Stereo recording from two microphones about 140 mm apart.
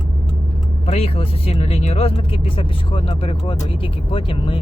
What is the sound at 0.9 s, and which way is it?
Speech, 45° left (ahead or behind).